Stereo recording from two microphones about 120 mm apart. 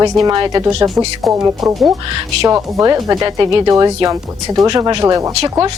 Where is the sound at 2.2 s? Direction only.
35° right (ahead or behind).